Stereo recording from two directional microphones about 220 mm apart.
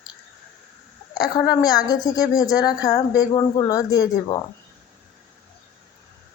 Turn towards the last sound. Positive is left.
turn(degrees=15)  # may be behind; listen again after turning